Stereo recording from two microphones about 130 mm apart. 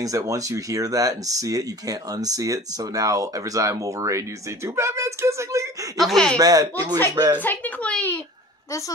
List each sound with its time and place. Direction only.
0.0 s speech: 25° right (ahead or behind)
5.9 s speech: centre (ahead or behind)
6.3 s speech: 30° right (ahead or behind)
7.3 s a sound: 15° left (ahead or behind)